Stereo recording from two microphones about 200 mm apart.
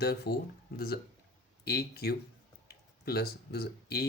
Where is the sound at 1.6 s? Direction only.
50° left (ahead or behind).